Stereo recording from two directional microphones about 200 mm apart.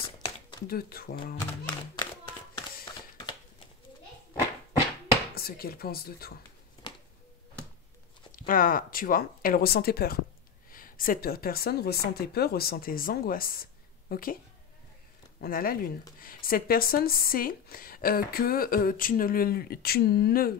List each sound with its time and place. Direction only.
0.2 s a sound: 25° left (ahead or behind)
0.7 s speech: 50° left (ahead or behind)
2.8 s a sound: 25° left (ahead or behind)
5.3 s speech: 50° left (ahead or behind)
8.3 s a woman's voice: 45° left (ahead or behind)
15.4 s speech: 45° left (ahead or behind)